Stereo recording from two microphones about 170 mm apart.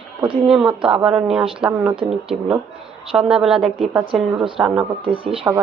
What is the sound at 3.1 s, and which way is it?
Speech, 5° right (ahead or behind).